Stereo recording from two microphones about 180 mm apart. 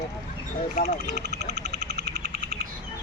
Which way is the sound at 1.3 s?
70° right (ahead or behind).